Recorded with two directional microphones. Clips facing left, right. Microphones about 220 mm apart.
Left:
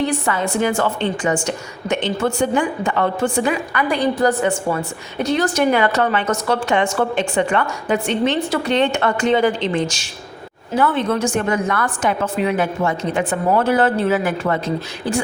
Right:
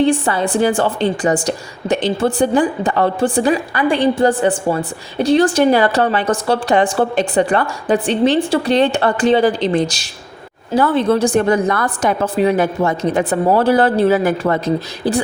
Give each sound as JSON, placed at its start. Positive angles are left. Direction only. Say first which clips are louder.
{"t": 0.0, "sound": "a woman's voice", "louder": "right 5 dB", "side_deg": -30}